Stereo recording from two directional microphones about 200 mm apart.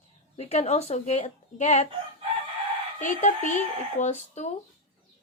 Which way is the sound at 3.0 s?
40° left (ahead or behind).